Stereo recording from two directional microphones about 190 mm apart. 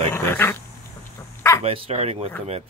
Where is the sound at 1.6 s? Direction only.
35° right (ahead or behind).